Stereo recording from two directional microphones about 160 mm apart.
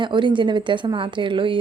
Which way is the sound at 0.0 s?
30° right (ahead or behind).